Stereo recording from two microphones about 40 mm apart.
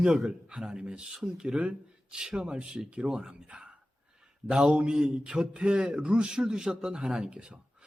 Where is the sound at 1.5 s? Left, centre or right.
Right.